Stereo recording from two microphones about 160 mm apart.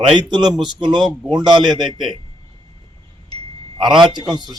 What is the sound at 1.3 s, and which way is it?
Speech, 25° right (ahead or behind).